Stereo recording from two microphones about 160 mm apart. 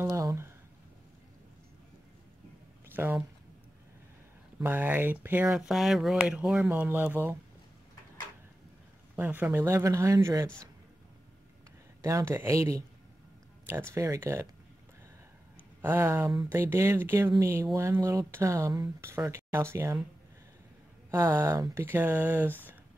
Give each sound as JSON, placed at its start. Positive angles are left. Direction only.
{"t": 0.0, "sound": "a sound", "side_deg": -20}
{"t": 2.9, "sound": "speech", "side_deg": -10}
{"t": 4.6, "sound": "speech", "side_deg": -10}
{"t": 9.1, "sound": "speech", "side_deg": -10}
{"t": 12.0, "sound": "speech", "side_deg": -20}
{"t": 13.9, "sound": "speech", "side_deg": -20}
{"t": 15.8, "sound": "speech", "side_deg": -15}
{"t": 21.1, "sound": "speech", "side_deg": -15}
{"t": 22.5, "sound": "speech", "side_deg": 10}